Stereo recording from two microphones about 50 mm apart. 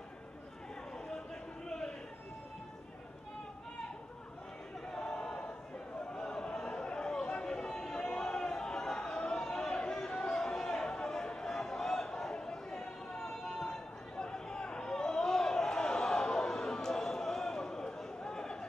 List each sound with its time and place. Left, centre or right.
1.7 s a sound: centre
4.9 s choir: centre
6.1 s chatter: centre